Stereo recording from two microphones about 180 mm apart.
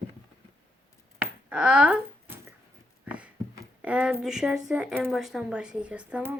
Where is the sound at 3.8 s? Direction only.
5° right (ahead or behind).